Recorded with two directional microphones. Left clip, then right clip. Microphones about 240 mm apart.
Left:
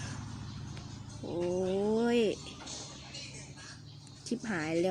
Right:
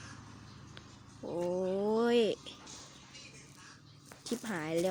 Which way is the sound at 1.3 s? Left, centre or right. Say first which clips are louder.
Left 1 dB; centre.